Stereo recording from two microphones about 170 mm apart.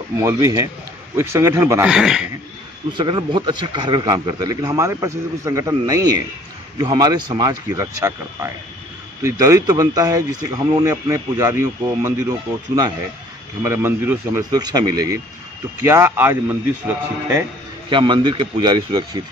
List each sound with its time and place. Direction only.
0.2 s speech: 20° right (ahead or behind)
2.9 s speech: 25° right (ahead or behind)
17.8 s speech: 30° right (ahead or behind)